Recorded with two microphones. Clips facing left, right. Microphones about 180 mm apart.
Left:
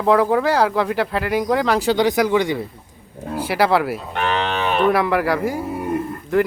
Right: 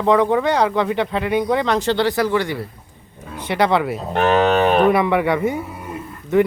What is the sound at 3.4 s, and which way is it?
Speech, 5° left (ahead or behind).